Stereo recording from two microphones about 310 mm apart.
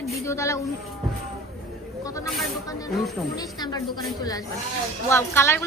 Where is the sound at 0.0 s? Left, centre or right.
Centre.